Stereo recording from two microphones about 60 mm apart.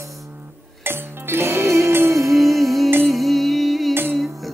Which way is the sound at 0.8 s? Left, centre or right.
Right.